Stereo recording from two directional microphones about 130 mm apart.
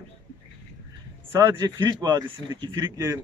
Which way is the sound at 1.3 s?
20° right (ahead or behind).